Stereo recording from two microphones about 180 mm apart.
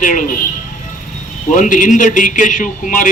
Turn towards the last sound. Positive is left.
turn(degrees=45)  # may be behind; listen again after turning